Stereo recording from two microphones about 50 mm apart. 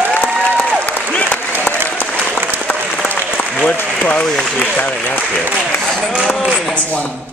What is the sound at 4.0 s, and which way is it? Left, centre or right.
Speech, left.